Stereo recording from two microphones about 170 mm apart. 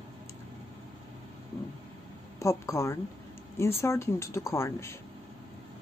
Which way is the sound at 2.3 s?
20° left (ahead or behind).